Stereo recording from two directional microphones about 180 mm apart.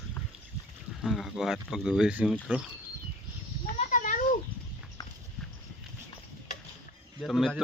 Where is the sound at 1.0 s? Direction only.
Centre (ahead or behind).